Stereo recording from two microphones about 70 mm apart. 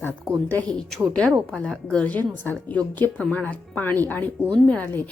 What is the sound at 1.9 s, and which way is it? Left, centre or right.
A woman's voice, centre.